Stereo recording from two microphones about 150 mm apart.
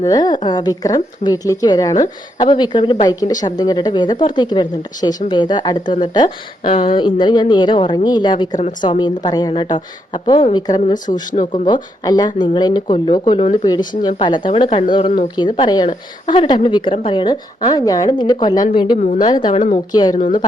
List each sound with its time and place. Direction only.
0.0 s a woman's voice: 25° left (ahead or behind)
10.9 s speech: 60° left (ahead or behind)
11.5 s a woman's voice: 30° left (ahead or behind)